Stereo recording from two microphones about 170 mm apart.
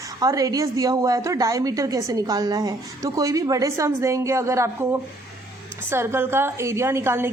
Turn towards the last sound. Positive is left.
turn(degrees=-15)  # may be behind; listen again after turning